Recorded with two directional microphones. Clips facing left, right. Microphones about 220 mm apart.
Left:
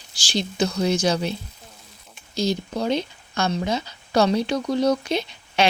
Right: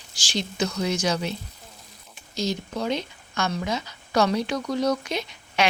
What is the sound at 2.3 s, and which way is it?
Speech, 35° left (ahead or behind).